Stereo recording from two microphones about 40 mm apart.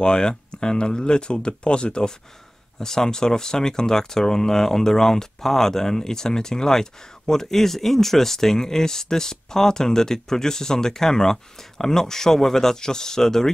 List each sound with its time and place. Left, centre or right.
0.0 s speech: left